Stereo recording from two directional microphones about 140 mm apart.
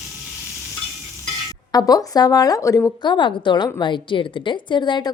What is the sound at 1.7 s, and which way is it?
Speech, 25° left (ahead or behind).